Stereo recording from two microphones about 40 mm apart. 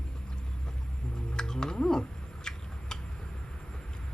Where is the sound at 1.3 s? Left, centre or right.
Centre.